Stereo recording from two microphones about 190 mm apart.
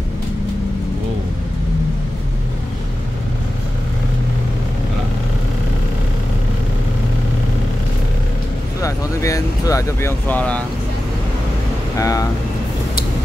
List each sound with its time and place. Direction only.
8.8 s vehicle: 15° left (ahead or behind)
12.0 s speech: 20° left (ahead or behind)